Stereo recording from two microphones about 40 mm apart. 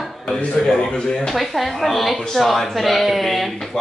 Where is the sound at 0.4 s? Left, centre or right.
Left.